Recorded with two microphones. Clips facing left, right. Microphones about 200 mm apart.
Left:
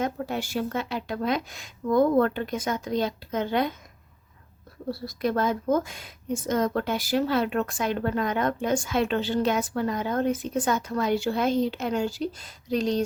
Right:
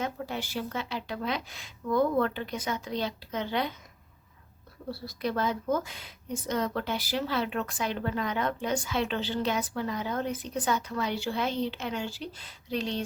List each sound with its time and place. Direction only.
0.0 s a woman's voice: 50° left (ahead or behind)
4.9 s a woman's voice: 50° left (ahead or behind)